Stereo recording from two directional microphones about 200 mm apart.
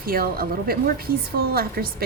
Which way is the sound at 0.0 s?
50° right (ahead or behind).